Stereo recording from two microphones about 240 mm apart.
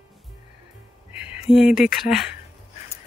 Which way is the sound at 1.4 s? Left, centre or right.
Centre.